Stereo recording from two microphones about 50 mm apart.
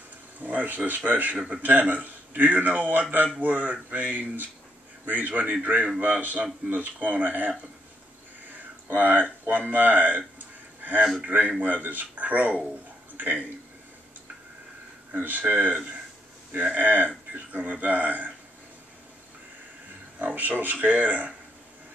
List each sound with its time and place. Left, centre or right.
0.4 s a man's voice: right
8.9 s a man's voice: right
11.2 s a man's voice: right
15.1 s a man's voice: right
16.7 s a man's voice: right
20.2 s a man's voice: right